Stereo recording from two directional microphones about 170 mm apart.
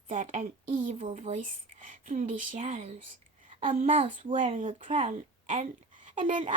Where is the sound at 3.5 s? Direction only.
35° right (ahead or behind).